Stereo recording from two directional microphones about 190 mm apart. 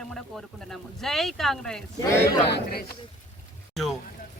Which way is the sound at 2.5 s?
55° left (ahead or behind).